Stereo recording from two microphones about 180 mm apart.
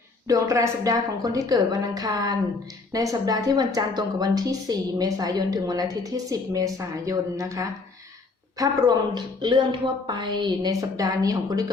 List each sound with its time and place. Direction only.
0.3 s speech: 20° right (ahead or behind)